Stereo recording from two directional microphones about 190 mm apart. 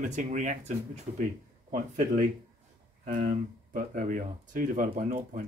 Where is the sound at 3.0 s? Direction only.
45° right (ahead or behind).